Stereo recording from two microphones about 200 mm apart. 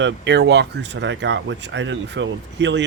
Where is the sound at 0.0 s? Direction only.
60° right (ahead or behind).